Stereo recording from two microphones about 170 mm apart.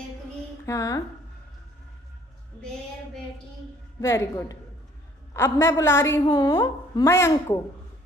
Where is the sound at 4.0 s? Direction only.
15° left (ahead or behind).